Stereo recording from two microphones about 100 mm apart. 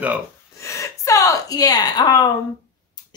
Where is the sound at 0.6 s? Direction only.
30° left (ahead or behind).